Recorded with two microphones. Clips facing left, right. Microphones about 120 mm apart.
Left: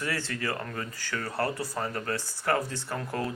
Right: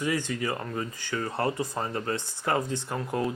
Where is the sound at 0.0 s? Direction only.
15° right (ahead or behind).